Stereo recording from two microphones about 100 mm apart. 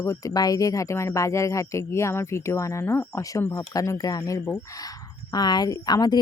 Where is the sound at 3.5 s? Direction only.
35° left (ahead or behind).